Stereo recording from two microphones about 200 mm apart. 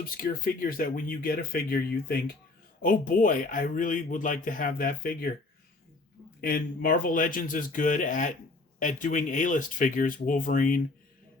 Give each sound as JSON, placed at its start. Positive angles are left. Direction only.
{"t": 0.2, "sound": "speech", "side_deg": 45}
{"t": 6.4, "sound": "speech", "side_deg": 45}